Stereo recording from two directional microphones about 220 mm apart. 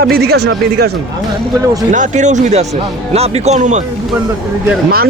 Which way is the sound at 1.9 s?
35° right (ahead or behind).